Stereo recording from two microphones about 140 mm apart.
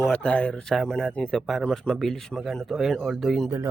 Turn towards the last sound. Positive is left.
turn(degrees=0)  # may be behind; listen again after turning